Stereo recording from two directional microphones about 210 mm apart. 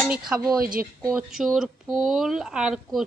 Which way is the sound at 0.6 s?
45° right (ahead or behind).